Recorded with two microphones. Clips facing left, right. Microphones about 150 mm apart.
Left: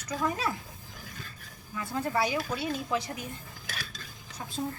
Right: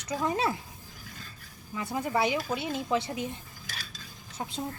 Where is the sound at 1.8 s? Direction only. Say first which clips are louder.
Right 1 dB; 15° right (ahead or behind).